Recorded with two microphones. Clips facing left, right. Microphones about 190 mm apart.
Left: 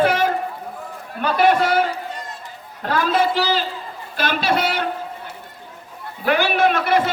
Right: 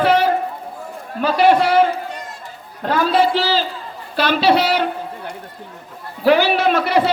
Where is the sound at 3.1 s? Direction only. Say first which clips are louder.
Right 3 dB; 45° left (ahead or behind).